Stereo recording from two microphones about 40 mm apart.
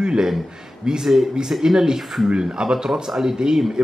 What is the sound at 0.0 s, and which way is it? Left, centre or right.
Speech, right.